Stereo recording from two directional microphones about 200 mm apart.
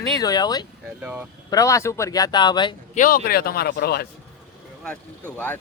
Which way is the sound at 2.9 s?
45° left (ahead or behind).